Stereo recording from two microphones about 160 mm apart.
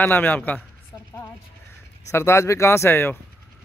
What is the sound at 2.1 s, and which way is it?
A man's voice, 15° left (ahead or behind).